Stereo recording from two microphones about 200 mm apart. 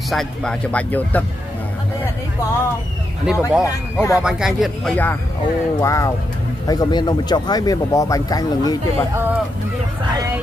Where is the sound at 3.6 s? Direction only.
15° left (ahead or behind).